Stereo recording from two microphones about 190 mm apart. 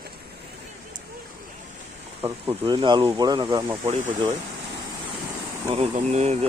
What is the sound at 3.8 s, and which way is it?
Speech, 40° right (ahead or behind).